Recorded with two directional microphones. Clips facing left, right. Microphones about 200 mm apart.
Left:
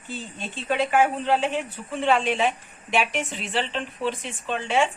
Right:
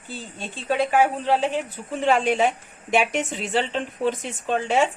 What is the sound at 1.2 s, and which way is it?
A woman's voice, 35° right (ahead or behind).